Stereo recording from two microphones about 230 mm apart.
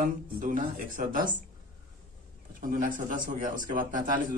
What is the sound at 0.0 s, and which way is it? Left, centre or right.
A man's voice, right.